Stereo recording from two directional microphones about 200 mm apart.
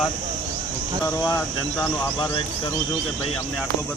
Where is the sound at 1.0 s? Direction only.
15° left (ahead or behind).